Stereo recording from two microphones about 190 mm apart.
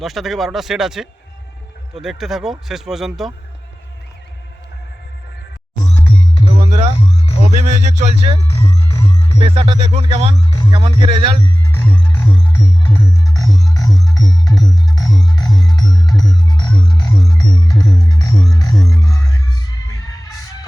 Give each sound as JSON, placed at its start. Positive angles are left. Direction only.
{"t": 0.0, "sound": "speech", "side_deg": 0}
{"t": 6.6, "sound": "music", "side_deg": -40}
{"t": 8.5, "sound": "music", "side_deg": 20}
{"t": 9.4, "sound": "music", "side_deg": -30}
{"t": 11.6, "sound": "music", "side_deg": 10}